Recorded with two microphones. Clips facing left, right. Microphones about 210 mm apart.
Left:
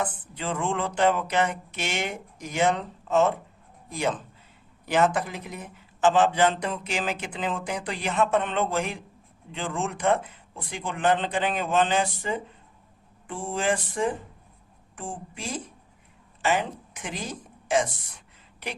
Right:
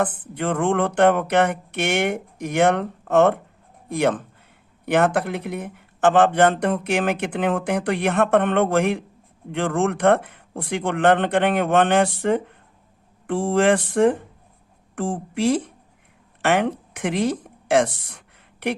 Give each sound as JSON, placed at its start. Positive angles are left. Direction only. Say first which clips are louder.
{"t": 0.0, "sound": "speech", "louder": "right 7 dB", "side_deg": -55}
{"t": 13.2, "sound": "speech", "louder": "right 9 dB", "side_deg": -75}
{"t": 14.9, "sound": "a woman's voice", "louder": "right 12 dB", "side_deg": -80}